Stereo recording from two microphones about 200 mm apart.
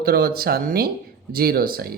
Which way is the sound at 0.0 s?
50° right (ahead or behind).